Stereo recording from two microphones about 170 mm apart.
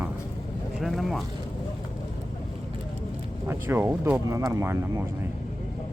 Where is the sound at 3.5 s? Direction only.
15° right (ahead or behind).